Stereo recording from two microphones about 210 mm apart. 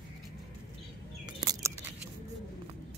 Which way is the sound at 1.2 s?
20° right (ahead or behind).